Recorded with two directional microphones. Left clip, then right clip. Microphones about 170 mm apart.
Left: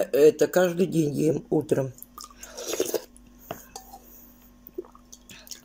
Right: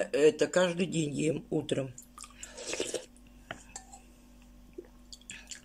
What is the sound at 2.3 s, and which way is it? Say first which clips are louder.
Chewing: left 7 dB; centre (ahead or behind).